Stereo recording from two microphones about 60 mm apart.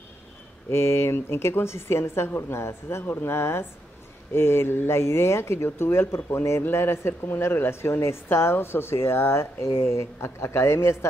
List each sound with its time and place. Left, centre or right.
0.7 s a woman's voice: left